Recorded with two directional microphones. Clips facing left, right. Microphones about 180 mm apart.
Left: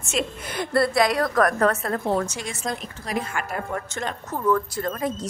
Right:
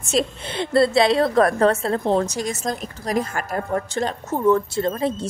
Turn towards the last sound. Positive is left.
turn(degrees=-25)  # may be behind; listen again after turning